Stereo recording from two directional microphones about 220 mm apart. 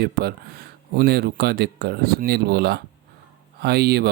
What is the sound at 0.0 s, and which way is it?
Speech, 45° right (ahead or behind).